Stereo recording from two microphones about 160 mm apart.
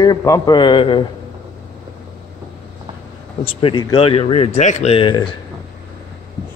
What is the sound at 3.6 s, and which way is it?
Speech, 35° left (ahead or behind).